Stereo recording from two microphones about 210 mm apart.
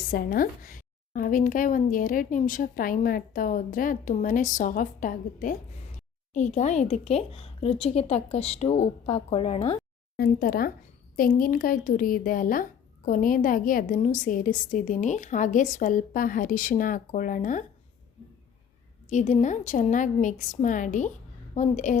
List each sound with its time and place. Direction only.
0.1 s speech: 45° left (ahead or behind)
10.2 s a woman's voice: 45° left (ahead or behind)
19.0 s a woman's voice: 35° left (ahead or behind)